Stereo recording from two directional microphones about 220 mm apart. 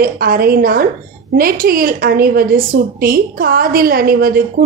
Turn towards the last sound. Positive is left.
turn(degrees=-40)  # may be behind; listen again after turning